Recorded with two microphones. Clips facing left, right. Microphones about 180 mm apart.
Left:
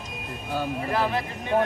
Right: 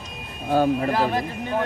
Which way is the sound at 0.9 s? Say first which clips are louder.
Right 3 dB; 40° right (ahead or behind).